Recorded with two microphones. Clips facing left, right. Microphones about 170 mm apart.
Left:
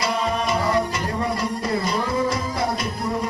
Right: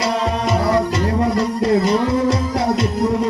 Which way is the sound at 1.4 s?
75° right (ahead or behind).